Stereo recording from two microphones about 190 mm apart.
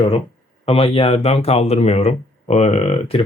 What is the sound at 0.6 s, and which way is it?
Speech, 30° left (ahead or behind).